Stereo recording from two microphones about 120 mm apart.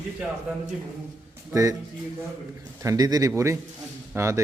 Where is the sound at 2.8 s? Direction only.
30° right (ahead or behind).